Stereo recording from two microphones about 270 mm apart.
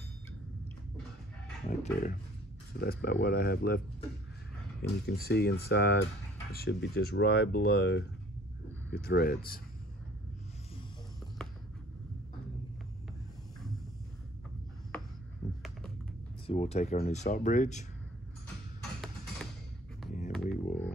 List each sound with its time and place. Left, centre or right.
1.7 s speech: left
4.8 s speech: left
9.0 s speech: left
16.4 s speech: left
20.1 s a sound: left